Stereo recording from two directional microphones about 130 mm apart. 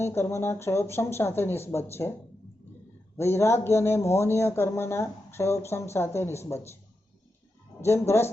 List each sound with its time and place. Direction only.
0.0 s speech: 20° left (ahead or behind)
3.2 s speech: 20° left (ahead or behind)
7.8 s speech: 20° left (ahead or behind)